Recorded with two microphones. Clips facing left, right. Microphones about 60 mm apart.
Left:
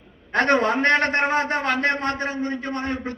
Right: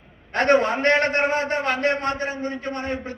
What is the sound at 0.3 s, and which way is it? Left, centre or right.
A man's voice, right.